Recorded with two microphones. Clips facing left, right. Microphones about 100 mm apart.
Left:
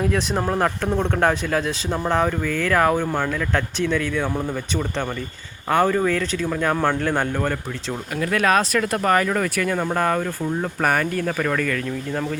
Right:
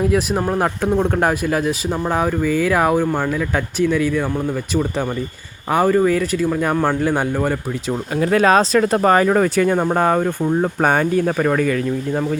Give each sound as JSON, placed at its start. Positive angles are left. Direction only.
{"t": 0.0, "sound": "speech", "side_deg": -5}
{"t": 8.1, "sound": "speech", "side_deg": -30}